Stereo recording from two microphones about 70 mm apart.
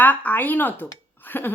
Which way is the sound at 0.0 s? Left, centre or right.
Left.